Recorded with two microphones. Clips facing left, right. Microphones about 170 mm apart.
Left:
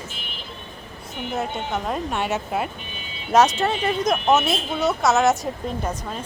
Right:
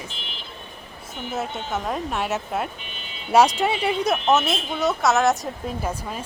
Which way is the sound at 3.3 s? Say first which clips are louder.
Even; 10° right (ahead or behind).